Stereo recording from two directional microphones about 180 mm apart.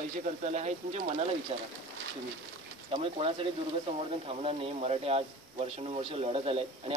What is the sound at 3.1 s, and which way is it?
A man's voice, 30° right (ahead or behind).